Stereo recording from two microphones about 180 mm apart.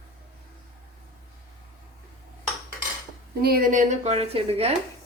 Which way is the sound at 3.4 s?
55° right (ahead or behind).